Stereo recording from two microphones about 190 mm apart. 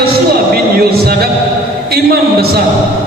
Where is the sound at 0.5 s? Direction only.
55° right (ahead or behind).